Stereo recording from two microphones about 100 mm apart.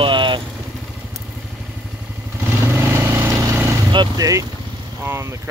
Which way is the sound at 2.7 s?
25° right (ahead or behind).